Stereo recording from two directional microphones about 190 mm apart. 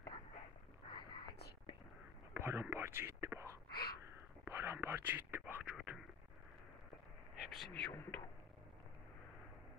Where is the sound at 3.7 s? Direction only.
55° left (ahead or behind).